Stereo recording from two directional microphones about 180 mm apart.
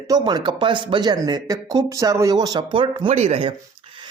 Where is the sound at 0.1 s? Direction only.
25° right (ahead or behind).